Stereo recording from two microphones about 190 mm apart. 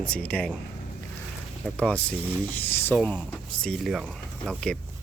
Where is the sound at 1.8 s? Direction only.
5° left (ahead or behind).